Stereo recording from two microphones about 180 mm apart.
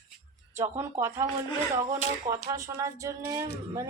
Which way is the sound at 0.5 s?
15° right (ahead or behind).